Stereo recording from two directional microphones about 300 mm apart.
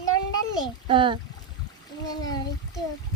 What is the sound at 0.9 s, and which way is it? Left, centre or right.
Speech, centre.